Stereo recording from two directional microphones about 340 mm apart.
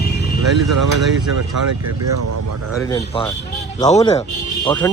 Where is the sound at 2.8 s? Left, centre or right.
Centre.